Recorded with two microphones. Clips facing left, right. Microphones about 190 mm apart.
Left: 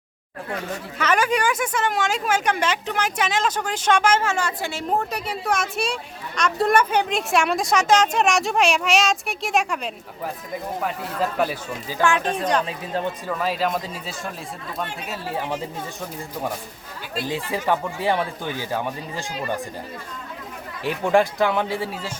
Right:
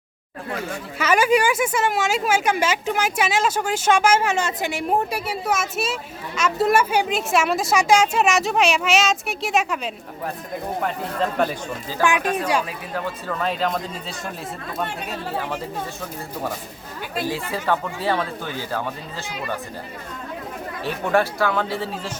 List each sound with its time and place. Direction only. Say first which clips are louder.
0.9 s speech: right 3 dB; 10° right (ahead or behind)
12.2 s a man's voice: even; 30° left (ahead or behind)
13.2 s speech: right 3 dB; 5° left (ahead or behind)
17.2 s speech: left 1 dB; 15° left (ahead or behind)
20.8 s speech: left 2 dB; 15° left (ahead or behind)